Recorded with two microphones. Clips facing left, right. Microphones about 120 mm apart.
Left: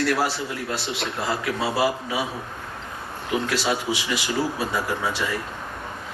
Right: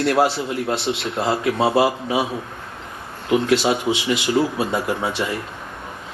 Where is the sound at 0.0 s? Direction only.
25° right (ahead or behind).